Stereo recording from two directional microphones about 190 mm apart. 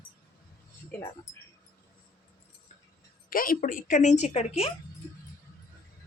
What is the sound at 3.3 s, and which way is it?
A woman's voice, 50° left (ahead or behind).